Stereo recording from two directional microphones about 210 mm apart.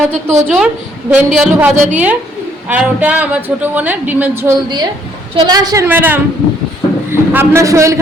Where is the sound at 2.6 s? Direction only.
5° right (ahead or behind).